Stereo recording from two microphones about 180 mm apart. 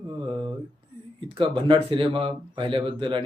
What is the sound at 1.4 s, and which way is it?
Speech, 25° right (ahead or behind).